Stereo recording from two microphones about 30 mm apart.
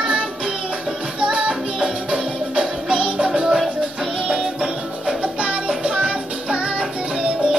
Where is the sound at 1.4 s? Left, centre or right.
Right.